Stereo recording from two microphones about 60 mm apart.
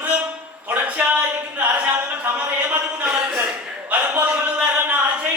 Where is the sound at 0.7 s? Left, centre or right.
Right.